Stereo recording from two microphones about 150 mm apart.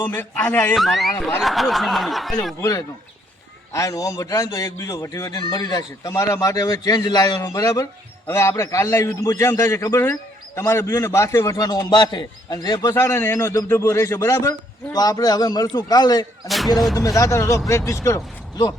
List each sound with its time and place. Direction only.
0.0 s a man's voice: 10° left (ahead or behind)
0.8 s snicker: centre (ahead or behind)
2.6 s speech: 20° left (ahead or behind)
16.5 s snicker: centre (ahead or behind)
16.9 s speech: 20° left (ahead or behind)